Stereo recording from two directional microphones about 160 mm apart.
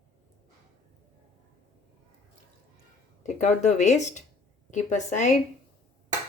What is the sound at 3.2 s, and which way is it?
Speech, 45° left (ahead or behind).